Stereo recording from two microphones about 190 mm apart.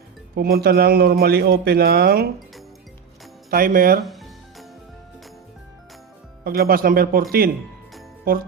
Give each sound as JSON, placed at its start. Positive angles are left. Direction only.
{"t": 0.3, "sound": "speech", "side_deg": -55}
{"t": 3.5, "sound": "speech", "side_deg": -50}
{"t": 4.0, "sound": "music", "side_deg": 0}
{"t": 6.4, "sound": "speech", "side_deg": -50}